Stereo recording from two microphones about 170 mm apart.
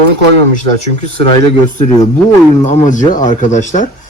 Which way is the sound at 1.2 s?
30° left (ahead or behind).